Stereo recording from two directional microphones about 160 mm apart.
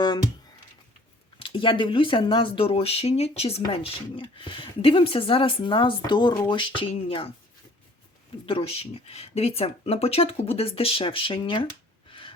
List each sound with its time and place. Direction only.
0.0 s a sound: 25° left (ahead or behind)
1.4 s speech: 30° left (ahead or behind)
6.6 s speech: 35° left (ahead or behind)
8.4 s speech: 35° left (ahead or behind)